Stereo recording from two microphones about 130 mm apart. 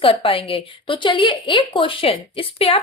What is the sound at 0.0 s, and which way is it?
A woman's voice, 45° left (ahead or behind).